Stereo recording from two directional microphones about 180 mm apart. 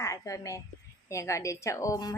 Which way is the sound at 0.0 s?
15° left (ahead or behind).